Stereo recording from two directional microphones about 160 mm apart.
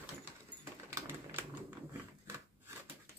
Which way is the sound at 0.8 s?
15° right (ahead or behind).